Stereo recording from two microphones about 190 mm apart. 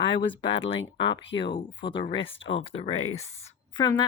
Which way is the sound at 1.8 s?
25° left (ahead or behind).